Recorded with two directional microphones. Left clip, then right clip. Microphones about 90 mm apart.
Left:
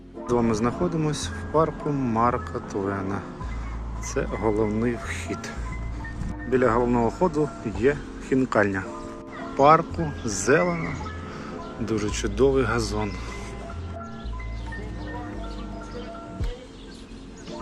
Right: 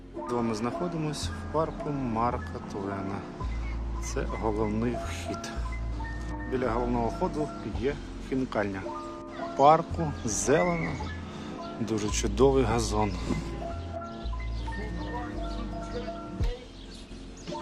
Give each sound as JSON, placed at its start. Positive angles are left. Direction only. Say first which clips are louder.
{"t": 0.5, "sound": "speech", "louder": "left 6 dB", "side_deg": 5}
{"t": 1.9, "sound": "speech", "louder": "left 6 dB", "side_deg": -10}
{"t": 2.2, "sound": "speech", "louder": "left 6 dB", "side_deg": 0}
{"t": 4.0, "sound": "speech", "louder": "left 6 dB", "side_deg": -15}
{"t": 6.5, "sound": "speech", "louder": "left 8 dB", "side_deg": 5}
{"t": 7.2, "sound": "speech", "louder": "left 7 dB", "side_deg": 10}
{"t": 9.6, "sound": "speech", "louder": "left 3 dB", "side_deg": -20}
{"t": 11.9, "sound": "speech", "louder": "left 4 dB", "side_deg": -40}